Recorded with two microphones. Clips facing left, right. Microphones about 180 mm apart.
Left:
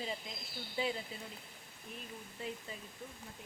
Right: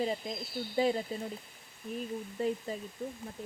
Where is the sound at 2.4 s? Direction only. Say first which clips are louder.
Right 11 dB; 40° right (ahead or behind).